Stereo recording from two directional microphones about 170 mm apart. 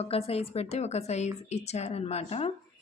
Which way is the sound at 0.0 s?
35° left (ahead or behind).